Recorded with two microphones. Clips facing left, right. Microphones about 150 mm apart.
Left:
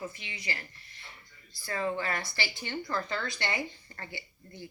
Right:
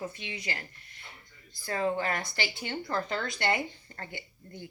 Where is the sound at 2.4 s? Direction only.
25° right (ahead or behind).